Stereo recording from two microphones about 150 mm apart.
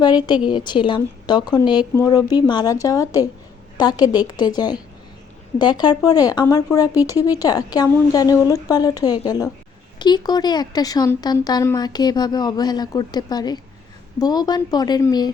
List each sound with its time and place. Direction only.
0.0 s a woman's voice: 30° left (ahead or behind)